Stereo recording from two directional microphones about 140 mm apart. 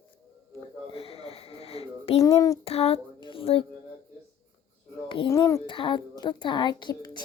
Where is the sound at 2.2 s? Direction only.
20° left (ahead or behind).